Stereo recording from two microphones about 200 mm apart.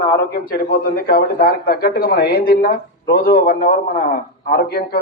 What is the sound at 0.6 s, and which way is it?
Speech, 45° left (ahead or behind).